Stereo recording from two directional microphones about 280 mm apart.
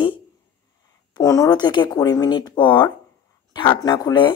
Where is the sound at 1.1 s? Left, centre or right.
Centre.